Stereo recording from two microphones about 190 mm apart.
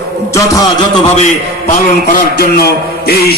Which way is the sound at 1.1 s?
50° left (ahead or behind).